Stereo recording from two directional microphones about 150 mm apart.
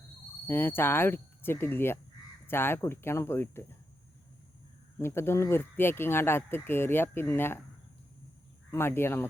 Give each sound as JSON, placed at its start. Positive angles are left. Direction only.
{"t": 0.4, "sound": "speech", "side_deg": 15}
{"t": 4.9, "sound": "speech", "side_deg": 15}
{"t": 8.7, "sound": "speech", "side_deg": 15}